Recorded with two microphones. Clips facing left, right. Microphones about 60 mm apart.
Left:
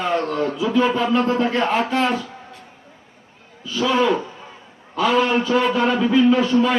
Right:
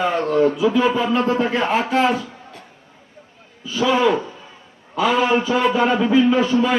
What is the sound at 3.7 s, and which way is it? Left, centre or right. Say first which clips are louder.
A man's voice: right 1 dB; centre.